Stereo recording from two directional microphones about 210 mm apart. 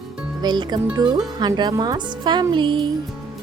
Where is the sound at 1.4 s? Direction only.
20° right (ahead or behind).